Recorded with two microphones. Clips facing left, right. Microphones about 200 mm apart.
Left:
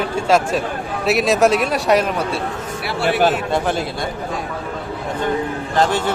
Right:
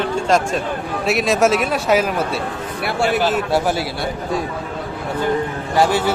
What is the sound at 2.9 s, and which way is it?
Speech, 45° right (ahead or behind).